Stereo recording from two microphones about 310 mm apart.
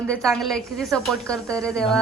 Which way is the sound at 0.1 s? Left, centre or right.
Centre.